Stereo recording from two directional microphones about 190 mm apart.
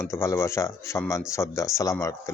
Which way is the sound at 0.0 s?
15° left (ahead or behind).